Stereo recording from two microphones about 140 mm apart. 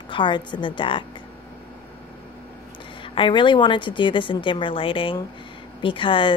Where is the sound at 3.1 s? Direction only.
35° left (ahead or behind).